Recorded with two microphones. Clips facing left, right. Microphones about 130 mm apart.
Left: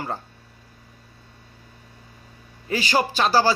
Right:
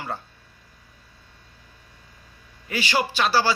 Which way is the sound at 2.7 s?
40° left (ahead or behind).